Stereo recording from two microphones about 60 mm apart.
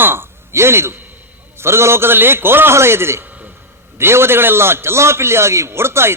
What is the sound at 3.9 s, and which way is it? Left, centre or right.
A man's voice, right.